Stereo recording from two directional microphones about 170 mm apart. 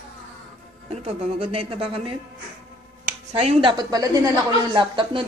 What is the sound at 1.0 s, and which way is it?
Speech, 35° right (ahead or behind).